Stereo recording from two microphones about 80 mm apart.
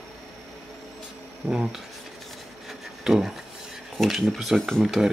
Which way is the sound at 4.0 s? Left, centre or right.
Centre.